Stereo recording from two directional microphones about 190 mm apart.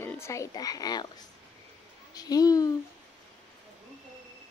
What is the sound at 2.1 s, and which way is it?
Speech, 20° left (ahead or behind).